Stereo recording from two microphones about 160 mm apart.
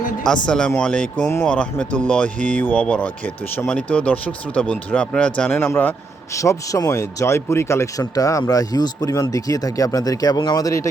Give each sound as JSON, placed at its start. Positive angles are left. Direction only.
{"t": 0.4, "sound": "speech", "side_deg": 5}